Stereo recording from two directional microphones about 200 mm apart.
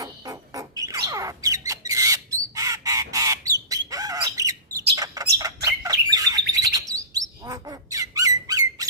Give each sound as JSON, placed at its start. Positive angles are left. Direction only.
{"t": 0.0, "sound": "bird", "side_deg": -15}